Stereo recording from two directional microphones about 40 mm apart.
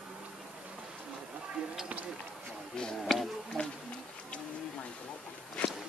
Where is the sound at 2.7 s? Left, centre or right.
Centre.